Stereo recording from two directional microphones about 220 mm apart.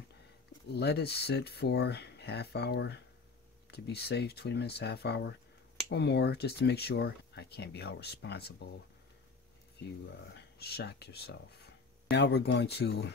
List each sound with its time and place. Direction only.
0.7 s speech: 50° left (ahead or behind)
10.0 s speech: 50° left (ahead or behind)